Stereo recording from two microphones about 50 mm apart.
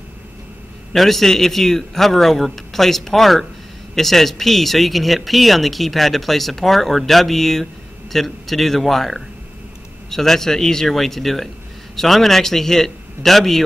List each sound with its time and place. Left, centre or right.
0.9 s a man's voice: centre